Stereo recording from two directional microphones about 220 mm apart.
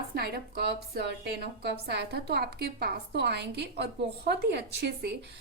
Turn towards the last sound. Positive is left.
turn(degrees=-50)  # may be behind; listen again after turning